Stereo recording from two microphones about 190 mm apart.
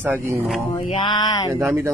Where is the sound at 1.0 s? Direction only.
25° left (ahead or behind).